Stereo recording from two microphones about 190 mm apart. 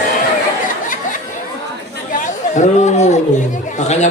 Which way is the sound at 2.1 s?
40° left (ahead or behind).